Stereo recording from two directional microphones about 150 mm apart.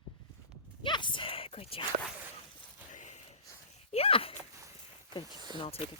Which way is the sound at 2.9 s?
55° left (ahead or behind).